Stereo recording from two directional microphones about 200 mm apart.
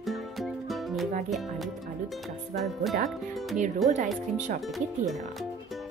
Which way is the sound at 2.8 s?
Centre (ahead or behind).